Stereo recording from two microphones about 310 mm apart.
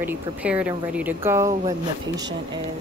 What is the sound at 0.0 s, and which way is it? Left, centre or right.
Speech, centre.